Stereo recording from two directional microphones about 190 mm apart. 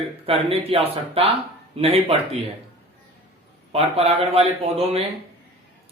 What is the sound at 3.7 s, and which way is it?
Speech, 30° right (ahead or behind).